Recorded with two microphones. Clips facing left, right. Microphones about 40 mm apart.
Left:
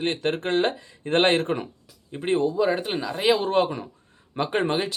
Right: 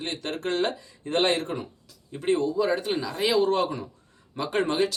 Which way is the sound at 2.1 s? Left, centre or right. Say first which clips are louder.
Left 1 dB; left.